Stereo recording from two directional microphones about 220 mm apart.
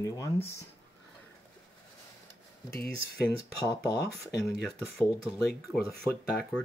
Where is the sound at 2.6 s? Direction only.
45° left (ahead or behind).